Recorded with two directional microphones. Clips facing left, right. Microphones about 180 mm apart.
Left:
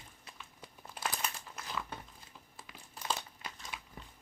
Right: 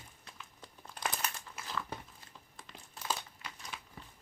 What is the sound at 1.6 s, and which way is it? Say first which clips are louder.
Crumpling: even; 10° right (ahead or behind).